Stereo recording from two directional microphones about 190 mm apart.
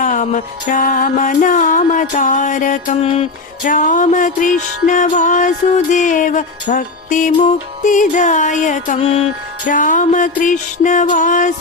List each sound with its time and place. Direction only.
0.0 s music: 40° left (ahead or behind)